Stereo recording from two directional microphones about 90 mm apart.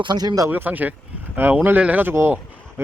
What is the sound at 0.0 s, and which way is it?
Speech, 55° right (ahead or behind).